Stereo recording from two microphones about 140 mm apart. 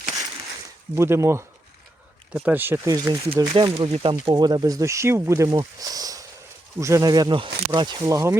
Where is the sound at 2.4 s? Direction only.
15° right (ahead or behind).